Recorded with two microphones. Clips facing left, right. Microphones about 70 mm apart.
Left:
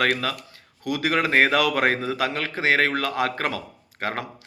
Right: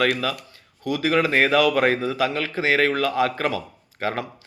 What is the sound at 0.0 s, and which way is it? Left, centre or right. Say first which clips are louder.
Speech: right 1 dB; left.